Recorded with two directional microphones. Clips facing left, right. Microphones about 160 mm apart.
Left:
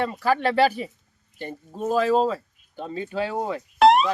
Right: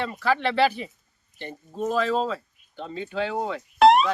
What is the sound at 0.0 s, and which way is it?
Speech, 45° left (ahead or behind).